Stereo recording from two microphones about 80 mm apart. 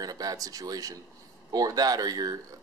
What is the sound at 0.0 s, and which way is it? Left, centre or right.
Speech, right.